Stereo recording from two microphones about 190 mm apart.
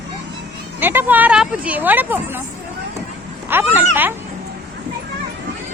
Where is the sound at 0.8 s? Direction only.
10° right (ahead or behind).